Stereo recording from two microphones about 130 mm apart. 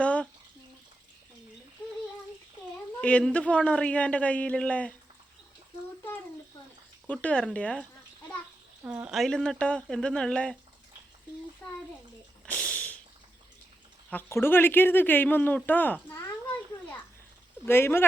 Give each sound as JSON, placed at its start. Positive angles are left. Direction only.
{"t": 0.0, "sound": "a sound", "side_deg": 10}
{"t": 3.0, "sound": "speech", "side_deg": 10}
{"t": 7.1, "sound": "speech", "side_deg": 10}
{"t": 8.8, "sound": "speech", "side_deg": -15}
{"t": 9.0, "sound": "speech", "side_deg": 0}
{"t": 11.6, "sound": "bathtub", "side_deg": 5}
{"t": 12.5, "sound": "whip", "side_deg": 10}
{"t": 14.1, "sound": "speech", "side_deg": 15}
{"t": 17.7, "sound": "speech", "side_deg": 20}